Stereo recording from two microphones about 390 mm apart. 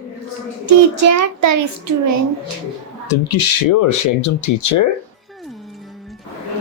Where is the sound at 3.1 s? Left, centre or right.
Left.